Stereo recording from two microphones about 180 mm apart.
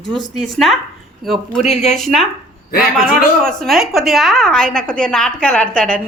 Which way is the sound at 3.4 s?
Centre (ahead or behind).